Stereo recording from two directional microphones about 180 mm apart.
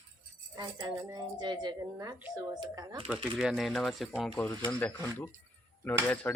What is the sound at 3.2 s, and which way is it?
Speech, centre (ahead or behind).